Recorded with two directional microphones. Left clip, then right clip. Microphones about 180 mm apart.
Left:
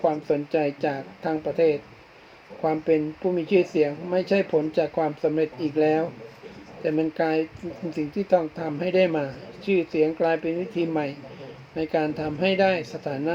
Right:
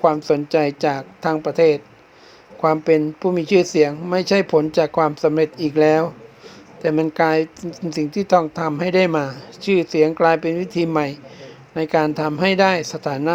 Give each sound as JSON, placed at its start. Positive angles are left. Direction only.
{"t": 0.0, "sound": "speech", "side_deg": -35}
{"t": 7.9, "sound": "speech", "side_deg": -90}
{"t": 8.5, "sound": "speech", "side_deg": -35}